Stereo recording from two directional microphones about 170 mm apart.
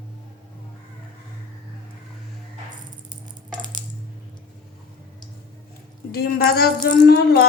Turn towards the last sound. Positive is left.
turn(degrees=65)  # may be behind; listen again after turning